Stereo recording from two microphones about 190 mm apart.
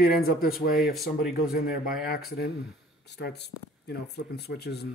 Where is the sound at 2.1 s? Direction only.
55° left (ahead or behind).